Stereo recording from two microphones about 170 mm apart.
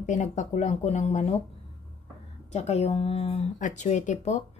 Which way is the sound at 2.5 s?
40° left (ahead or behind).